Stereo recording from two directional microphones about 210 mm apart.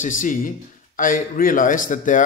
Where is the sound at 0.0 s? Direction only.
40° left (ahead or behind).